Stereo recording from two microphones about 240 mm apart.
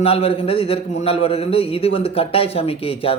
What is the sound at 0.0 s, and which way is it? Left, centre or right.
A man's voice, left.